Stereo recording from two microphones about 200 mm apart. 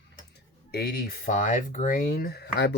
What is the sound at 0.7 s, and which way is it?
Speech, 50° left (ahead or behind).